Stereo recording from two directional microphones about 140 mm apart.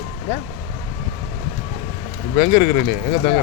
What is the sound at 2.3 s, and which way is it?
Speech, 90° left.